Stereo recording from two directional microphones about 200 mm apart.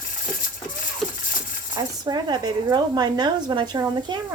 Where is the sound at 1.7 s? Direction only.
20° right (ahead or behind).